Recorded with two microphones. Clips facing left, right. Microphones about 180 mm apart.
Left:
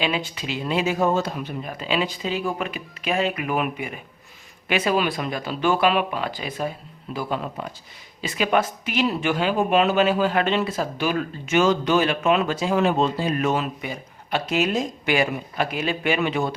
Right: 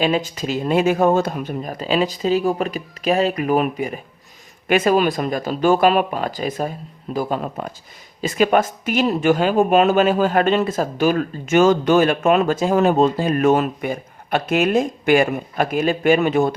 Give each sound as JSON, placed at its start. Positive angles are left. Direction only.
{"t": 0.0, "sound": "speech", "side_deg": -45}